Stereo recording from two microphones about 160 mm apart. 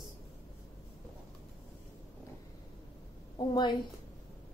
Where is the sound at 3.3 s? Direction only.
25° left (ahead or behind).